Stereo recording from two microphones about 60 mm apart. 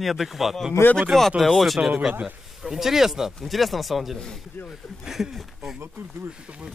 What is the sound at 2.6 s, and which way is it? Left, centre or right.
Speech, centre.